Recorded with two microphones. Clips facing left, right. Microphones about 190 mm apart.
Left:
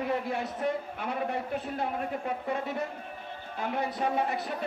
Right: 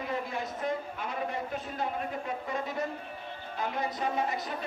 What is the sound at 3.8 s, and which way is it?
Speech, 60° left (ahead or behind).